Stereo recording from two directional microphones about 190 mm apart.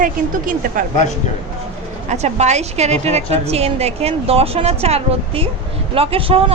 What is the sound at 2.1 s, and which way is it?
A woman's voice, 35° right (ahead or behind).